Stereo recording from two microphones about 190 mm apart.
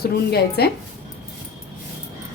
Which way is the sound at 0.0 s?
55° left (ahead or behind).